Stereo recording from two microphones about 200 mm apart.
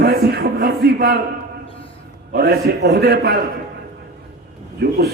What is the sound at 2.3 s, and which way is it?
A man's voice, 50° right (ahead or behind).